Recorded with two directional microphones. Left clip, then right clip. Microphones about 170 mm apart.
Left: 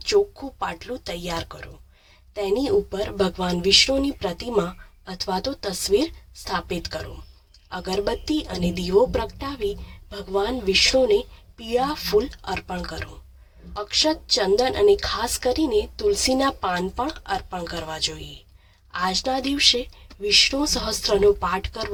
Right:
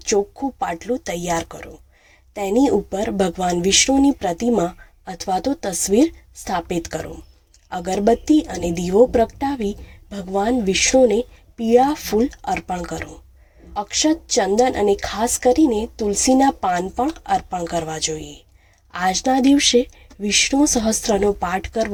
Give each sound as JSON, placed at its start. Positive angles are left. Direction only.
{"t": 0.6, "sound": "speech", "side_deg": -20}